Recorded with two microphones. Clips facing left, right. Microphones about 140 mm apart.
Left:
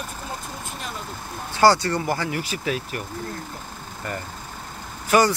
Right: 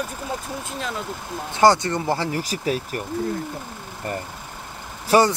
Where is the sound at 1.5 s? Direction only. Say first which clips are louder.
Right 1 dB; 20° right (ahead or behind); by 3.0 s 40° right (ahead or behind).